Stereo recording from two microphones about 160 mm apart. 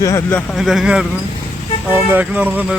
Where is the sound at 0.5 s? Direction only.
Centre (ahead or behind).